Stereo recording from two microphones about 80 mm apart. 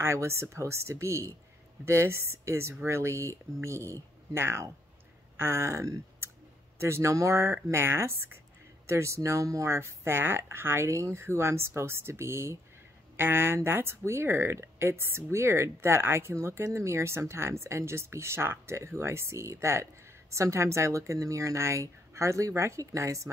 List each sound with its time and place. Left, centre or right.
0.0 s speech: right